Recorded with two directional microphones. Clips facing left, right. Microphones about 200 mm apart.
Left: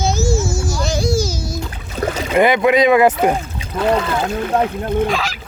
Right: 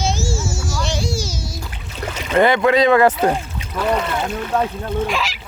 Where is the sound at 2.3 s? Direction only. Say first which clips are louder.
Left 1 dB; 15° left (ahead or behind).